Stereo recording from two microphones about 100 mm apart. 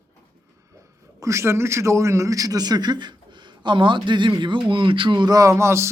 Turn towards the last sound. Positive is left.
turn(degrees=-30)  # may be behind; listen again after turning